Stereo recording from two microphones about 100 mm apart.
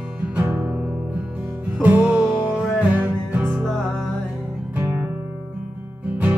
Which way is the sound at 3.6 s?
5° left (ahead or behind).